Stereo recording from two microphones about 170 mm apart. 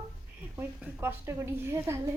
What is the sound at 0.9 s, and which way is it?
A woman's voice, 15° right (ahead or behind).